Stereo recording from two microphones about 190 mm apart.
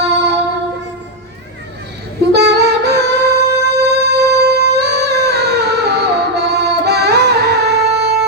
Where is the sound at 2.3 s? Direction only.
60° right (ahead or behind).